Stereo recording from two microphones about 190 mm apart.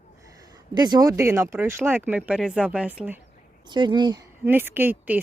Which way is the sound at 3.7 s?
25° right (ahead or behind).